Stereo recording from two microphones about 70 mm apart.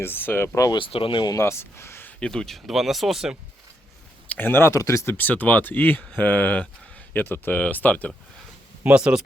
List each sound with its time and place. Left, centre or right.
0.0 s speech: left
2.0 s speech: centre
4.3 s speech: left
4.7 s speech: left
5.0 s speech: left
8.8 s speech: centre